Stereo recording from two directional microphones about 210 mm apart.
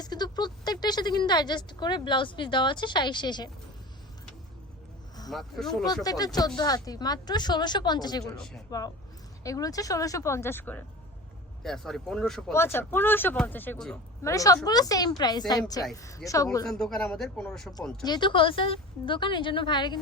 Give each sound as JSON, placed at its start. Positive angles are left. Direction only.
{"t": 0.0, "sound": "speech", "side_deg": 20}
{"t": 5.3, "sound": "speech", "side_deg": 0}
{"t": 5.8, "sound": "a woman's voice", "side_deg": 20}
{"t": 8.2, "sound": "speech", "side_deg": 0}
{"t": 9.4, "sound": "speech", "side_deg": 15}
{"t": 14.2, "sound": "a woman's voice", "side_deg": 15}
{"t": 16.6, "sound": "speech", "side_deg": 0}
{"t": 18.0, "sound": "a woman's voice", "side_deg": 20}